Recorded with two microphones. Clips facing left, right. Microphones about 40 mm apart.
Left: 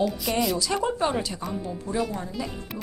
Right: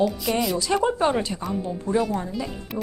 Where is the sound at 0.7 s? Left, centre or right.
Centre.